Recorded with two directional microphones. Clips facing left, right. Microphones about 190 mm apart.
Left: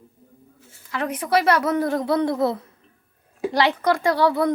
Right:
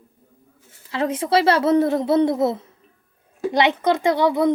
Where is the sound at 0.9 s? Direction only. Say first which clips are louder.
Right 3 dB; 25° right (ahead or behind).